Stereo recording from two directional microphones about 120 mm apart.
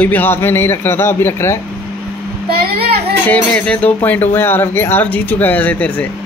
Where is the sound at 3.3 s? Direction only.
10° left (ahead or behind).